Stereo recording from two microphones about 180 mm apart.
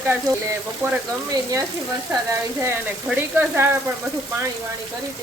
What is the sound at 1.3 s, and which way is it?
Frying, 20° right (ahead or behind).